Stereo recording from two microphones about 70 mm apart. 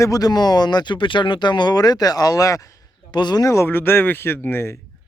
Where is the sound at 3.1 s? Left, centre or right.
Left.